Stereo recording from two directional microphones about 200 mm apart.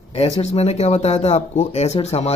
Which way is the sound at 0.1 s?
30° left (ahead or behind).